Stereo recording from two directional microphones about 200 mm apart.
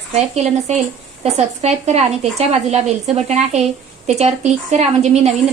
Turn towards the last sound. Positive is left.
turn(degrees=-35)  # may be behind; listen again after turning